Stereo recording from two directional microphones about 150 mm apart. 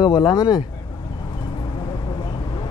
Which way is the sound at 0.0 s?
25° left (ahead or behind).